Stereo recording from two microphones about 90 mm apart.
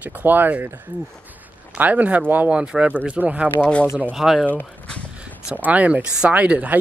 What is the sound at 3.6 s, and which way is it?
Speech, 15° left (ahead or behind).